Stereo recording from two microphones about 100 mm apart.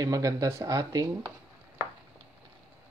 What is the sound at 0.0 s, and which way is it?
Speech, 35° right (ahead or behind).